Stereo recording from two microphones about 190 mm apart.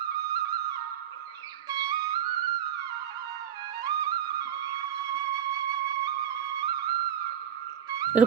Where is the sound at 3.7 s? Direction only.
20° right (ahead or behind).